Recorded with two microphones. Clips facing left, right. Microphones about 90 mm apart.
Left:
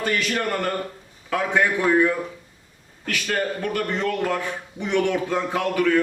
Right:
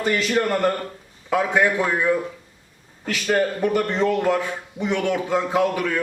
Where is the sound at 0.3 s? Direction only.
10° right (ahead or behind).